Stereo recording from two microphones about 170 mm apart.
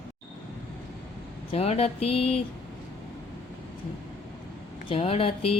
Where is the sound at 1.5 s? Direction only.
35° left (ahead or behind).